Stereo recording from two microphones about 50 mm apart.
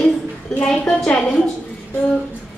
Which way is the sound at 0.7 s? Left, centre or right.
Centre.